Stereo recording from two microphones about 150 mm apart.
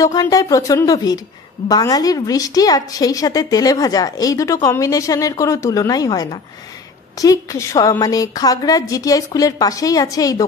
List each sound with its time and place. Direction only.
0.0 s a woman's voice: 25° left (ahead or behind)